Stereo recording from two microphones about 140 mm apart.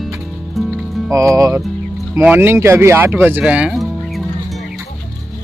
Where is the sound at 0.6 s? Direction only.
Centre (ahead or behind).